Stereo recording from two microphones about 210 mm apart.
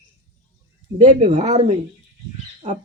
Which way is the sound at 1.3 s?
30° right (ahead or behind).